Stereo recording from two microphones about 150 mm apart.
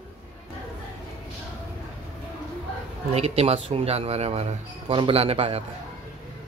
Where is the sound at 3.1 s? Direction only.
45° right (ahead or behind).